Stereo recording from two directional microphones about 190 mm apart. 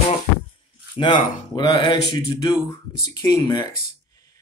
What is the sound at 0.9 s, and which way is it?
Speech, 25° left (ahead or behind).